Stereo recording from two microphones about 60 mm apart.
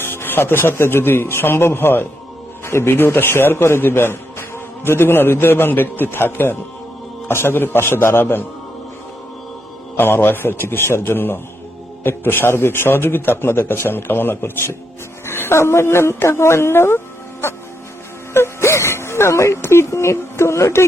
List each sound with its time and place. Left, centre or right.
0.0 s a man's voice: left
10.0 s a man's voice: left
18.3 s speech: left